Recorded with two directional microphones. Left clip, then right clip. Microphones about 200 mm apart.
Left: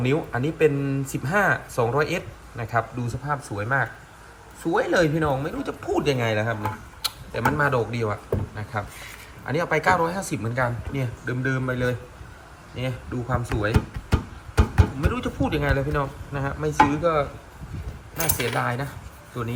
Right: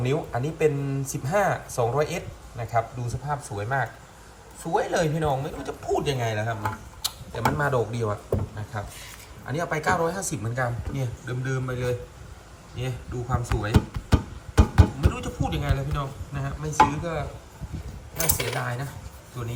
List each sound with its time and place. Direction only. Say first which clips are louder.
0.1 s speech: left 2 dB; 5° right (ahead or behind)
13.2 s music: left 4 dB; 5° right (ahead or behind)
16.8 s speech: left 2 dB; 5° right (ahead or behind)